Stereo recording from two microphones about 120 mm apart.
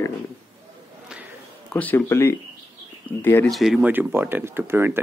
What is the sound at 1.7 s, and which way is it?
Speech, 15° left (ahead or behind).